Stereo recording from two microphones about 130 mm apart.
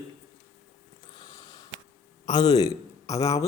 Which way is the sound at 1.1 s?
35° left (ahead or behind).